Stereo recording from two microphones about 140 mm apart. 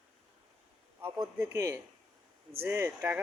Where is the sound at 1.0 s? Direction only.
15° right (ahead or behind).